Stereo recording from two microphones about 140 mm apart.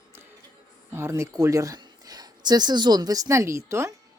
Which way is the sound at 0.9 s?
20° right (ahead or behind).